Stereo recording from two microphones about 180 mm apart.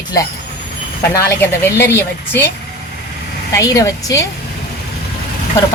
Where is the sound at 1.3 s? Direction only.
10° left (ahead or behind).